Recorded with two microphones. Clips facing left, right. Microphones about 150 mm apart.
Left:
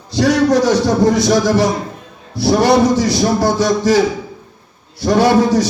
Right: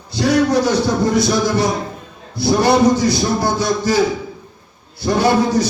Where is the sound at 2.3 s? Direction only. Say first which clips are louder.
Left 2 dB; 70° left (ahead or behind).